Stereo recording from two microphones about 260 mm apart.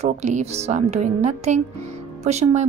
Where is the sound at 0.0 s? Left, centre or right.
Right.